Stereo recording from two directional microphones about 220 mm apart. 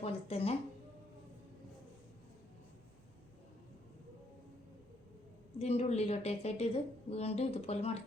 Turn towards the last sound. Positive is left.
turn(degrees=25)  # may be behind; listen again after turning